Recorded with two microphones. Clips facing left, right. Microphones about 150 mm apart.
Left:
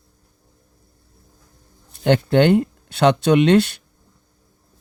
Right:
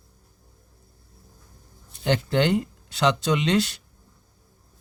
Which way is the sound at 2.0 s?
55° left (ahead or behind).